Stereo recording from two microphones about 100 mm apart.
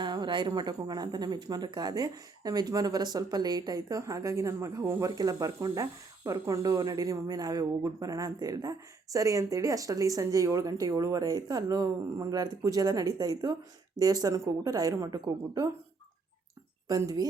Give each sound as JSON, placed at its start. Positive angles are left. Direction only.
{"t": 0.0, "sound": "speech", "side_deg": -45}
{"t": 16.9, "sound": "speech", "side_deg": -35}